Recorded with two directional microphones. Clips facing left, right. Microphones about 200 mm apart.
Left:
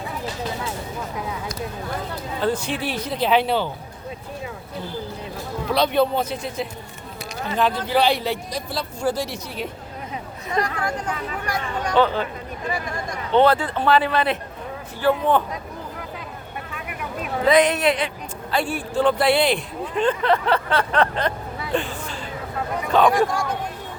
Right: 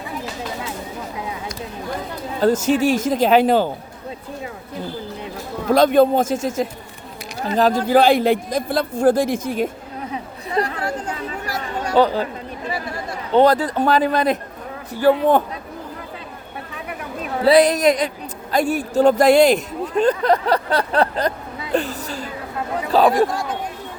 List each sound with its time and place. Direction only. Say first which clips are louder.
2.4 s speech: right 8 dB; 45° right (ahead or behind)
5.7 s speech: right 6 dB; 45° right (ahead or behind)
10.5 s speech: right 2 dB; 30° right (ahead or behind)
13.3 s speech: right 3 dB; 40° right (ahead or behind)
17.4 s speech: right 4 dB; 35° right (ahead or behind)